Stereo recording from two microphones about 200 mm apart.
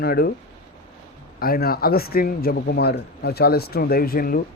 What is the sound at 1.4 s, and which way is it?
A man's voice, 50° left (ahead or behind).